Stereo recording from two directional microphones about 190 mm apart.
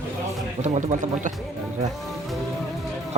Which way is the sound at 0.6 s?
40° right (ahead or behind).